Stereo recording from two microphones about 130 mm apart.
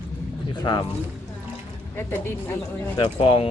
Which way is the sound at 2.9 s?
40° left (ahead or behind).